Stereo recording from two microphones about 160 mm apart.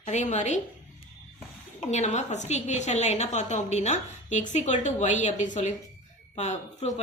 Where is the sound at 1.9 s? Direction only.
45° left (ahead or behind).